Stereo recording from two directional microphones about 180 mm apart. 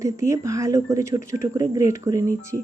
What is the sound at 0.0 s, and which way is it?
Speech, 15° right (ahead or behind).